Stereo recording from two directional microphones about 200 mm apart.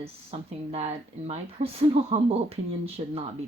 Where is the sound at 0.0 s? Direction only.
30° right (ahead or behind).